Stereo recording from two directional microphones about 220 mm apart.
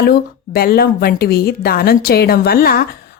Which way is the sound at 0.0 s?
45° left (ahead or behind).